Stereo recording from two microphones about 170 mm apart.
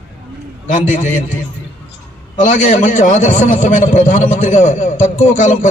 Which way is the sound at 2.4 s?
50° left (ahead or behind).